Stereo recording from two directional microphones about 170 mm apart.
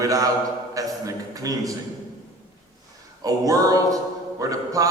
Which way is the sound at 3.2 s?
20° right (ahead or behind).